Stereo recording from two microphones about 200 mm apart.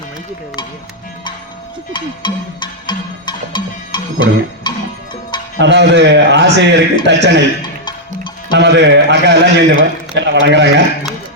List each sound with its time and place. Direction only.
1.9 s music: 25° left (ahead or behind)
5.5 s a man's voice: 60° right (ahead or behind)
7.9 s music: 25° left (ahead or behind)
8.5 s a man's voice: 60° right (ahead or behind)